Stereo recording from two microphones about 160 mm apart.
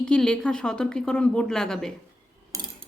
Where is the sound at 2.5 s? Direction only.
20° right (ahead or behind).